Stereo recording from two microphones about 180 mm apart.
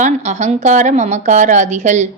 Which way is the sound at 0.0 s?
40° right (ahead or behind).